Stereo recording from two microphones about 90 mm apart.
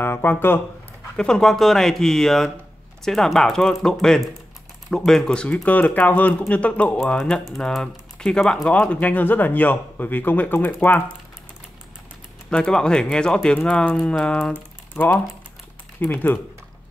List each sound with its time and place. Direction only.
0.0 s speech: 25° left (ahead or behind)
1.1 s speech: 10° left (ahead or behind)
12.4 s speech: 10° left (ahead or behind)
14.5 s speech: 20° left (ahead or behind)